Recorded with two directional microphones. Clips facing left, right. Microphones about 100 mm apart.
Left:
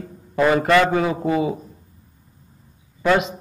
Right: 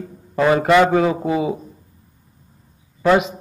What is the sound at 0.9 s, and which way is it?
Speech, 5° right (ahead or behind).